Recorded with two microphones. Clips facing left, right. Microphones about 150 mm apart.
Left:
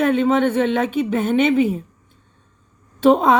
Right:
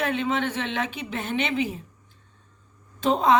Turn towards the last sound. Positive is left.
turn(degrees=55)  # may be behind; listen again after turning